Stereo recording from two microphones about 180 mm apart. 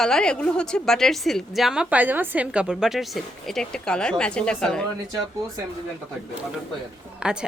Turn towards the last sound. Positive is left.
turn(degrees=-5)  # may be behind; listen again after turning